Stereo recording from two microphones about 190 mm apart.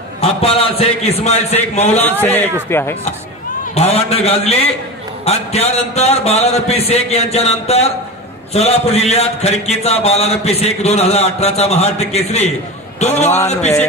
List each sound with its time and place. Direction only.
0.2 s speech: 30° left (ahead or behind)
2.0 s a man's voice: 10° left (ahead or behind)
3.7 s speech: 35° left (ahead or behind)